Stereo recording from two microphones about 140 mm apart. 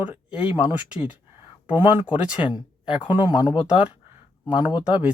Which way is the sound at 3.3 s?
35° left (ahead or behind).